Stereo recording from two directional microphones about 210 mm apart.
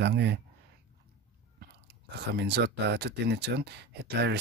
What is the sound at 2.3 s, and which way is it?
Speech, 55° right (ahead or behind).